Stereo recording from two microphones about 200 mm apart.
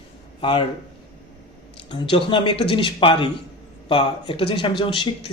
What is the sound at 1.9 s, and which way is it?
Speech, 25° left (ahead or behind).